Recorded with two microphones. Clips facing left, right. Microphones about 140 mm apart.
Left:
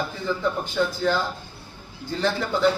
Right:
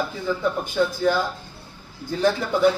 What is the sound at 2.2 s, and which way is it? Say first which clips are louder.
Speech: right 3 dB; 10° right (ahead or behind).